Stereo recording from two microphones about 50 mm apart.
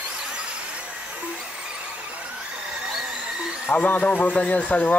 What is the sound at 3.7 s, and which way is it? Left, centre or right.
Speech, left.